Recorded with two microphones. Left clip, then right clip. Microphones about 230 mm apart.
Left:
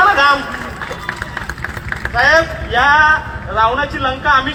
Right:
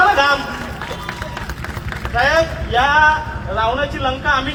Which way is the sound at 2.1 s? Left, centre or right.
Left.